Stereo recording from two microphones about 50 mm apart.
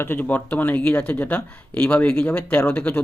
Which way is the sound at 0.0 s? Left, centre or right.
Left.